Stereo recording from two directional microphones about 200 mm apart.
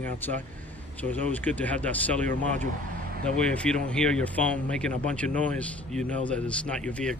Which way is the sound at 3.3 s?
5° left (ahead or behind).